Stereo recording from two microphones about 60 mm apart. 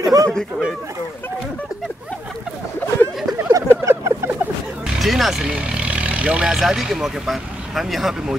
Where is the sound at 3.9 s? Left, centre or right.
Right.